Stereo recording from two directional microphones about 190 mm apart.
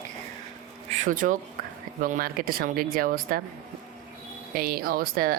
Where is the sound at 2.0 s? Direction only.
45° right (ahead or behind).